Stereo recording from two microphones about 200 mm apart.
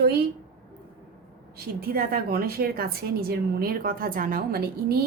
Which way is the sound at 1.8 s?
50° right (ahead or behind).